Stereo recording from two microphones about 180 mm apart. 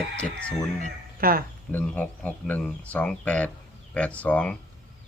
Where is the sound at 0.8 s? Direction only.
55° right (ahead or behind).